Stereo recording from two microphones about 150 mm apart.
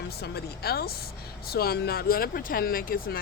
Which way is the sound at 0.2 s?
90° left.